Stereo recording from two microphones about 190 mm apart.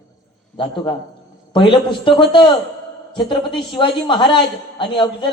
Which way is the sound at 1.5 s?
25° left (ahead or behind).